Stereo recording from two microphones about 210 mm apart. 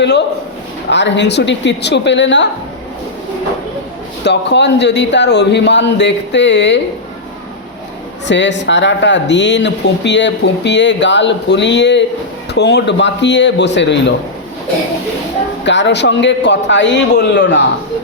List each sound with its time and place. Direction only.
0.0 s speech: 55° left (ahead or behind)
4.2 s speech: 55° left (ahead or behind)
8.3 s speech: 55° left (ahead or behind)
15.6 s speech: 60° left (ahead or behind)